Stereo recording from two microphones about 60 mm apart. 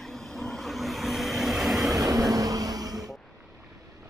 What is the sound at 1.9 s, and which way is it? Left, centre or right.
Vehicle, right.